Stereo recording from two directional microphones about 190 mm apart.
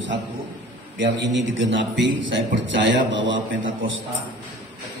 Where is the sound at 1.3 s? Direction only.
75° right (ahead or behind).